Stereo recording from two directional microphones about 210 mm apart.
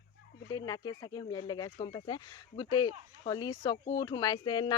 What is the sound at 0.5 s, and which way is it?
Speech, 20° left (ahead or behind).